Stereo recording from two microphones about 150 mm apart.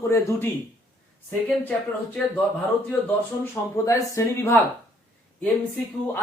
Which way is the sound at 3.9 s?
20° left (ahead or behind).